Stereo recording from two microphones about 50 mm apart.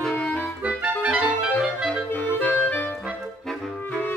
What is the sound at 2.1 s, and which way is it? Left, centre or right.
Clarinet, left.